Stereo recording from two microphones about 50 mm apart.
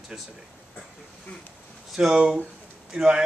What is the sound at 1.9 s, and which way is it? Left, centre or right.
A man's voice, centre.